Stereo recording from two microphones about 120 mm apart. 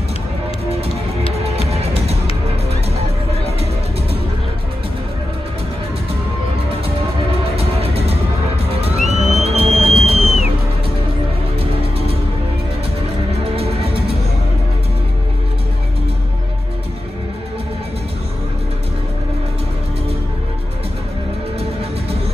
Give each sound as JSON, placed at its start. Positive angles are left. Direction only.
{"t": 1.3, "sound": "music", "side_deg": -60}
{"t": 7.5, "sound": "music", "side_deg": -55}
{"t": 13.3, "sound": "music", "side_deg": -55}